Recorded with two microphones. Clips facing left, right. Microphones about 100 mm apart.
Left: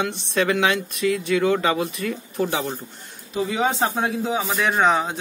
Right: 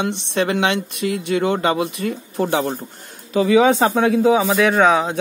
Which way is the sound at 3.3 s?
90° right.